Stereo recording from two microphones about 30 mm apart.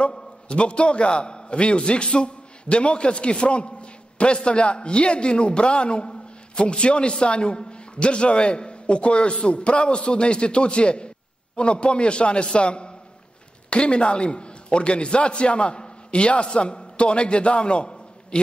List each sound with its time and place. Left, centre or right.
0.0 s a man's voice: left